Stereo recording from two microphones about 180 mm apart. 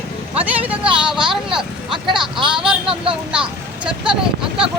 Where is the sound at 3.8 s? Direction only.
5° right (ahead or behind).